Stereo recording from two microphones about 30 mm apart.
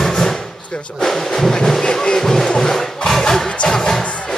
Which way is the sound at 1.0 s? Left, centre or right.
Centre.